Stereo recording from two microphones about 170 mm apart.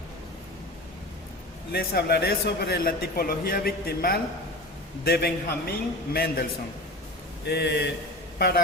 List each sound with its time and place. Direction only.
1.7 s a man's voice: 65° left (ahead or behind)
7.4 s speech: 80° left
8.4 s a man's voice: 65° left (ahead or behind)